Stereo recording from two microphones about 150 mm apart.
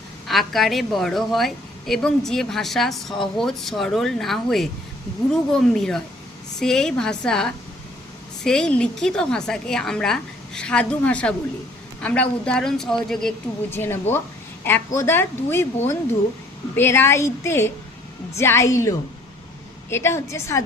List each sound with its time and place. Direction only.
0.3 s a woman's voice: centre (ahead or behind)
13.7 s a woman's voice: 15° left (ahead or behind)